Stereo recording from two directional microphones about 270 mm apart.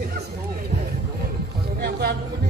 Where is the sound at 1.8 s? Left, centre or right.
Right.